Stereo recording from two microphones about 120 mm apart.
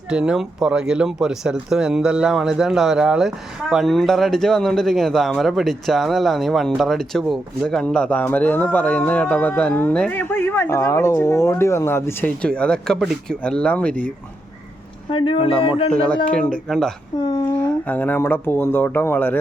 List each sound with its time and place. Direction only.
0.1 s speech: 5° right (ahead or behind); by 12.3 s 20° left (ahead or behind)
12.4 s speech: 10° left (ahead or behind)
15.1 s speech: 45° left (ahead or behind)
15.9 s speech: 10° left (ahead or behind)